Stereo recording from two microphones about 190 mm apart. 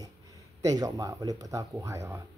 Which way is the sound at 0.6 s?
20° right (ahead or behind).